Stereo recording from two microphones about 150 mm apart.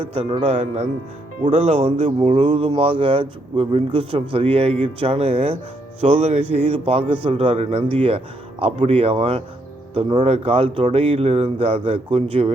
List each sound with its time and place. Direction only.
0.0 s speech: 40° right (ahead or behind)